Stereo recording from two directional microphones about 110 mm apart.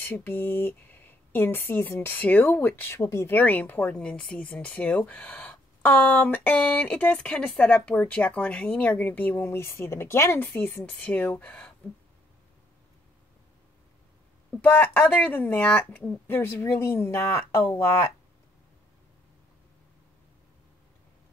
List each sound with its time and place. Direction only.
0.0 s speech: 20° left (ahead or behind)
10.8 s speech: 10° left (ahead or behind)
14.6 s speech: 15° left (ahead or behind)